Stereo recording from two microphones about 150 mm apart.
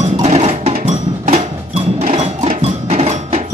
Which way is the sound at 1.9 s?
45° right (ahead or behind).